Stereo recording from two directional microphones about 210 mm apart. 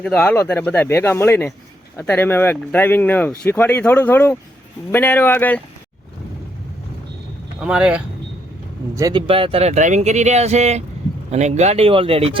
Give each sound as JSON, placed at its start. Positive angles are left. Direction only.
{"t": 0.0, "sound": "speech", "side_deg": 5}
{"t": 7.6, "sound": "speech", "side_deg": -5}
{"t": 9.0, "sound": "speech", "side_deg": -20}